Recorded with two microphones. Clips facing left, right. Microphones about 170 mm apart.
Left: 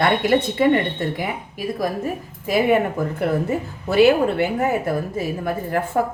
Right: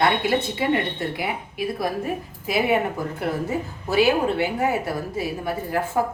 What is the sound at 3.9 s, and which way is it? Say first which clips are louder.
A woman's voice: left 4 dB; 55° left (ahead or behind).